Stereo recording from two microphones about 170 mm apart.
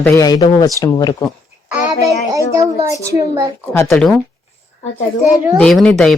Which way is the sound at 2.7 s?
20° right (ahead or behind).